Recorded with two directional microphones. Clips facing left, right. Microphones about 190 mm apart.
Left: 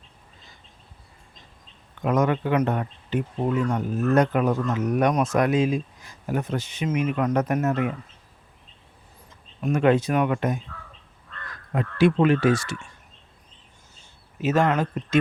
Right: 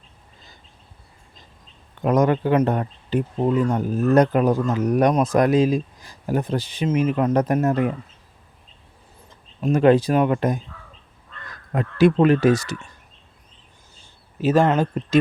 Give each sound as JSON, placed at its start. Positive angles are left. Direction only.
{"t": 2.0, "sound": "speech", "side_deg": -35}
{"t": 9.6, "sound": "speech", "side_deg": -30}
{"t": 11.7, "sound": "speech", "side_deg": -45}
{"t": 14.0, "sound": "speech", "side_deg": -30}